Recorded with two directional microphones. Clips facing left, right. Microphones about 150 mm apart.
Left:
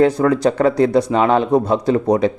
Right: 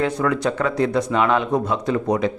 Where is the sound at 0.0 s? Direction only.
35° left (ahead or behind).